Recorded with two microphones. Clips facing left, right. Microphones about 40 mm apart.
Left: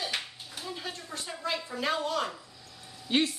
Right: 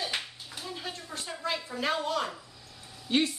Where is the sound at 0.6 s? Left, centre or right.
Centre.